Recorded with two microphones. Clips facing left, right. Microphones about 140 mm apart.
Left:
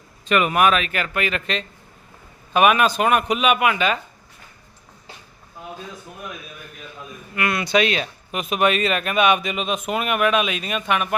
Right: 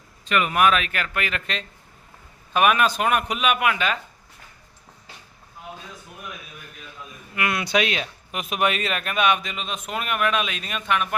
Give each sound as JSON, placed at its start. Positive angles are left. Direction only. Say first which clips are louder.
{"t": 0.3, "sound": "speech", "louder": "left 4 dB", "side_deg": 20}
{"t": 0.5, "sound": "speech", "louder": "left 2 dB", "side_deg": 5}
{"t": 7.3, "sound": "speech", "louder": "left 3 dB", "side_deg": -10}